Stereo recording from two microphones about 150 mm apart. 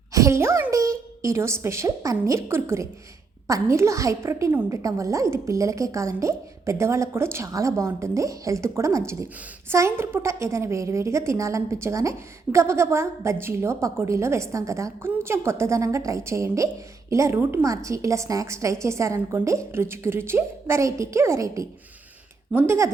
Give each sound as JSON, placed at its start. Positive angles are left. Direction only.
{"t": 0.1, "sound": "a woman's voice", "side_deg": -20}